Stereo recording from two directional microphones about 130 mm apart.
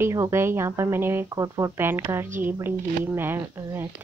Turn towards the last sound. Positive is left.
turn(degrees=-15)  # may be behind; listen again after turning